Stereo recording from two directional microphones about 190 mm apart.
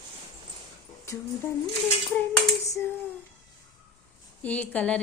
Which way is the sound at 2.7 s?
10° left (ahead or behind).